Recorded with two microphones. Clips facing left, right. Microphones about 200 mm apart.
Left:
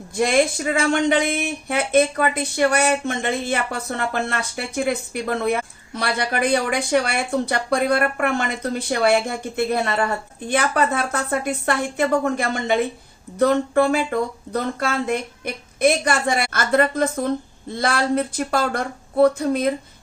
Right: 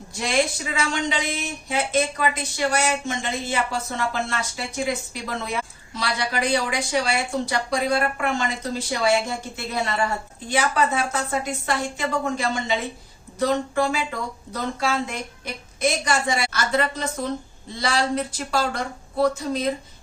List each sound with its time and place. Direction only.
0.2 s speech: 50° left (ahead or behind)